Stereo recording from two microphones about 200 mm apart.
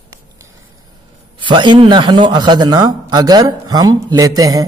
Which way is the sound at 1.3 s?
25° right (ahead or behind).